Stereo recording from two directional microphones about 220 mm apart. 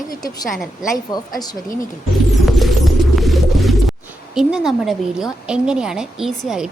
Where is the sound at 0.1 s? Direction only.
15° left (ahead or behind).